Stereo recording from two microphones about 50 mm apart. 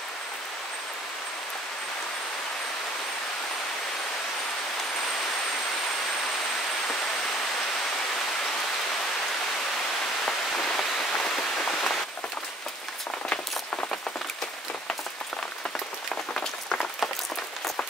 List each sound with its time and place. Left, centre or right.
10.2 s rain on surface: centre
16.3 s run: centre